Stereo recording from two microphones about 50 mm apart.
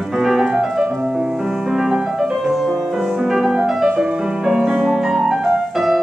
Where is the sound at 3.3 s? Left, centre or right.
Centre.